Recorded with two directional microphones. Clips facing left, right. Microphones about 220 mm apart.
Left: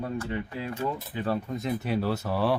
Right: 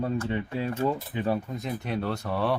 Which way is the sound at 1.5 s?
Centre (ahead or behind).